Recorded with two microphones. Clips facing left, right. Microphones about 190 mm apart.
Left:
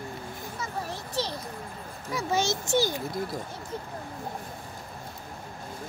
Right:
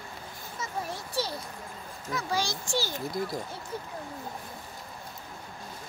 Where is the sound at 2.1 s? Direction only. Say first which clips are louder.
Left 4 dB; 20° left (ahead or behind).